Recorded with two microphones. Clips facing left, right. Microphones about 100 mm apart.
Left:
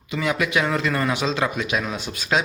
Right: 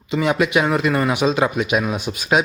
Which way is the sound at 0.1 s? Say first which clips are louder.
Right 5 dB; 25° right (ahead or behind).